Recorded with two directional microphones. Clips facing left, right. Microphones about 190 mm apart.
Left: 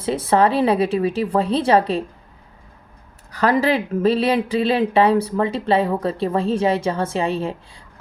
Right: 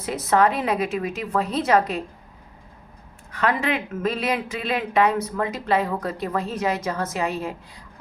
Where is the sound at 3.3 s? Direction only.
40° left (ahead or behind).